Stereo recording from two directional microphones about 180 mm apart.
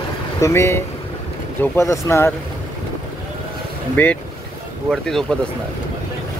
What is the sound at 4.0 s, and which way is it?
Speech, 10° left (ahead or behind).